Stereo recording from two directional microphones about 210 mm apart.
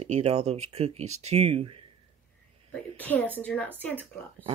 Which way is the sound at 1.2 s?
30° right (ahead or behind).